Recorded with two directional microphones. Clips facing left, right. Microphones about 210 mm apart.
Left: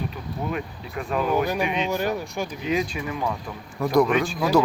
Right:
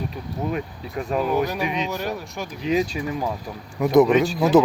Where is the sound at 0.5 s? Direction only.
40° right (ahead or behind).